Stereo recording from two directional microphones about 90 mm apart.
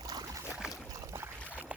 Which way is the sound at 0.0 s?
45° right (ahead or behind).